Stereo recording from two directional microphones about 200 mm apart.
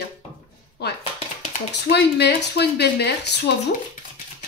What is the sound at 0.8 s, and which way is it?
Speech, 55° left (ahead or behind).